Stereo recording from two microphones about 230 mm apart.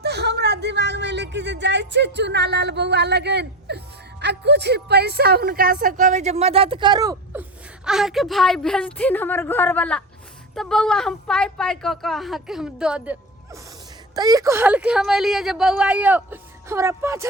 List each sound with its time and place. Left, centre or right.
0.0 s a woman's voice: right; by 7.4 s centre
7.9 s a woman's voice: centre
14.2 s speech: centre